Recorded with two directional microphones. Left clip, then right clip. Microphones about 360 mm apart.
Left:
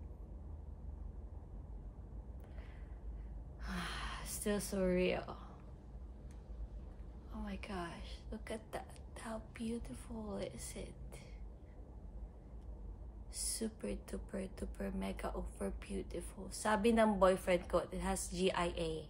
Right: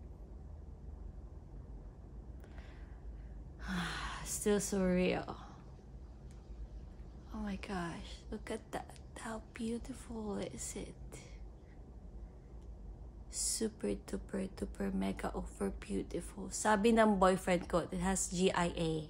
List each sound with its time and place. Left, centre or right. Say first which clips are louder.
3.6 s a sound: right 3 dB; right
7.3 s speech: right 3 dB; right
13.3 s speech: right 5 dB; right